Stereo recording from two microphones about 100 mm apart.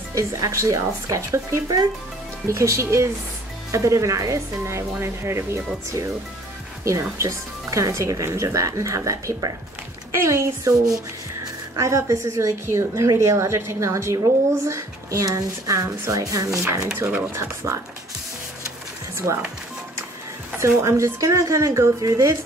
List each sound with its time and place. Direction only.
0.1 s a woman's voice: 30° right (ahead or behind)
6.8 s a woman's voice: 30° right (ahead or behind)
16.9 s a woman's voice: 20° right (ahead or behind)
19.1 s speech: 30° right (ahead or behind)
20.5 s speech: 30° right (ahead or behind)